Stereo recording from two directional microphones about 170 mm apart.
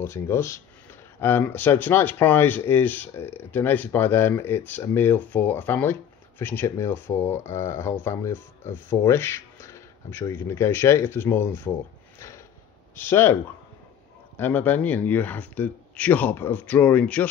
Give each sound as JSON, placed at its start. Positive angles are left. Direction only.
{"t": 0.0, "sound": "speech", "side_deg": 15}
{"t": 12.9, "sound": "speech", "side_deg": 15}